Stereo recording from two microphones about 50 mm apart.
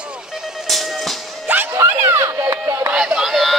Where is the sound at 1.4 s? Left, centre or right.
Right.